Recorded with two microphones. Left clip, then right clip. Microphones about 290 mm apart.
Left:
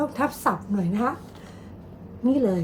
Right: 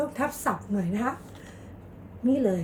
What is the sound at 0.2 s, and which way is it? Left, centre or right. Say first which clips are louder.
Speech: left 4 dB; centre.